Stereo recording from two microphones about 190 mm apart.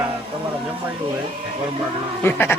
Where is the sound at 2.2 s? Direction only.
10° left (ahead or behind).